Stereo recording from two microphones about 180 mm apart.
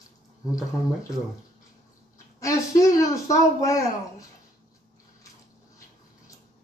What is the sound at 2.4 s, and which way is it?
A child's voice, 15° left (ahead or behind).